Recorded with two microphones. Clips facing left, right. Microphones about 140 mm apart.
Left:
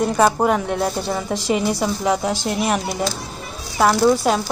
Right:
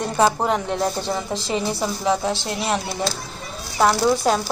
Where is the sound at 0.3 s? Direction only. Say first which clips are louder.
Left 3 dB; 10° left (ahead or behind).